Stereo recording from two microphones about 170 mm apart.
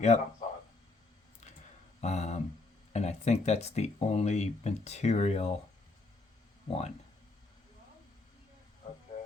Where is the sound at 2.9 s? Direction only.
40° left (ahead or behind).